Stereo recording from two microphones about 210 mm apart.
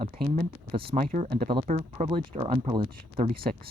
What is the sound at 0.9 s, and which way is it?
Speech, 40° right (ahead or behind).